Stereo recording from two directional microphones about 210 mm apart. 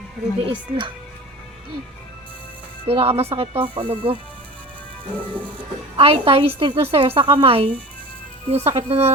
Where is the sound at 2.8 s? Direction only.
30° right (ahead or behind).